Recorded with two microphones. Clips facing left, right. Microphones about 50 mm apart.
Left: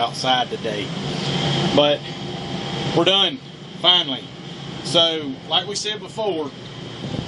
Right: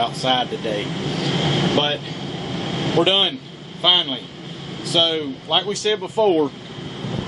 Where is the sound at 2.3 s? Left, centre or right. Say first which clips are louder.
Right 2 dB; centre.